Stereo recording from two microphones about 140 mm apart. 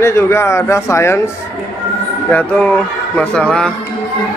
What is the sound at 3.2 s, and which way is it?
Speech, 5° left (ahead or behind).